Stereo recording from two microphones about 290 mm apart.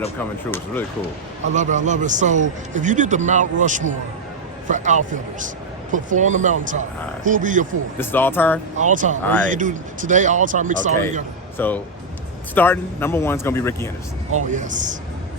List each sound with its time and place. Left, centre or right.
0.5 s speech: centre
1.5 s speech: right
7.9 s speech: centre
8.7 s speech: right
11.5 s speech: centre
14.3 s speech: right